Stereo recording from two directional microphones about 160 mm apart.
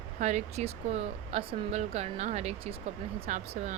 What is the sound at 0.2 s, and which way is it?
Speech, 45° right (ahead or behind).